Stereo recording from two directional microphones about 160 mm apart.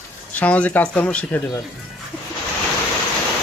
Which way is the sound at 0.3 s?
10° left (ahead or behind).